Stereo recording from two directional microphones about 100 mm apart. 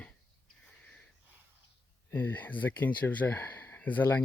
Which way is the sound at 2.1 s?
20° left (ahead or behind).